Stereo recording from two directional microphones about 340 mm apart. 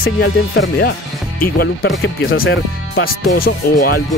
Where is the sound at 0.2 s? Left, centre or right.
Left.